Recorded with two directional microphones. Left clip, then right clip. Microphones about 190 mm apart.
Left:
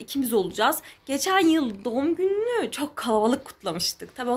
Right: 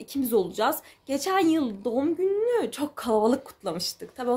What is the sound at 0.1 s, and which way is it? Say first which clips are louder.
A woman's voice: even; 5° right (ahead or behind).